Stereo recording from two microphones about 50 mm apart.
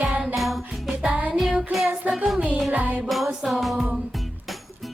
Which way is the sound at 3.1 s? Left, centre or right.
Centre.